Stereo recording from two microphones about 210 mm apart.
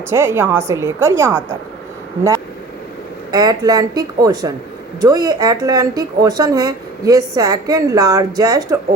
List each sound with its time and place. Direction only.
0.1 s speech: 10° right (ahead or behind)
3.3 s speech: 20° right (ahead or behind)